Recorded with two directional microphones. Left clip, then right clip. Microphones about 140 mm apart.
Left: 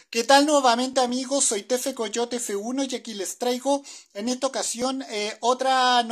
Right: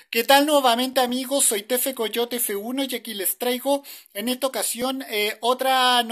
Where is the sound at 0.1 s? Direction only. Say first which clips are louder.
Right 1 dB; 10° right (ahead or behind).